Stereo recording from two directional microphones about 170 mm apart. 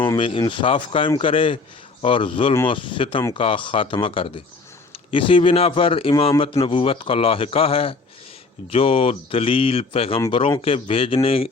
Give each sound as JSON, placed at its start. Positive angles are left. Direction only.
{"t": 0.2, "sound": "a man's voice", "side_deg": 30}